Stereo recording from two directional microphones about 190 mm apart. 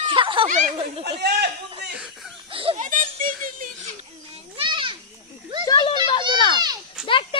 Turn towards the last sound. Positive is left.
turn(degrees=25)  # may be behind; listen again after turning